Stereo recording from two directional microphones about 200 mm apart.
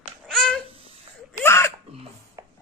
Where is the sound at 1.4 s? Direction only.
15° left (ahead or behind).